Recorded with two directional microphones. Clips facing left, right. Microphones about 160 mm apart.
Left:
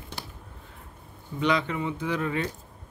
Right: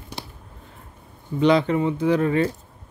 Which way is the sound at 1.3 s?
35° right (ahead or behind).